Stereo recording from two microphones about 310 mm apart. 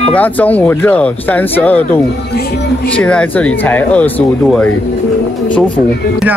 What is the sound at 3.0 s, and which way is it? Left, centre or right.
Speech, centre.